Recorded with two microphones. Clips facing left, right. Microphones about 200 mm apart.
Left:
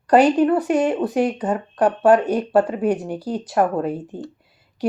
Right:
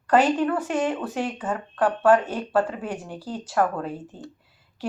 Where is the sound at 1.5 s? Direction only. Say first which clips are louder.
Left 5 dB; 20° left (ahead or behind).